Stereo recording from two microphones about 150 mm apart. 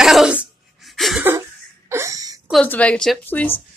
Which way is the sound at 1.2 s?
15° right (ahead or behind).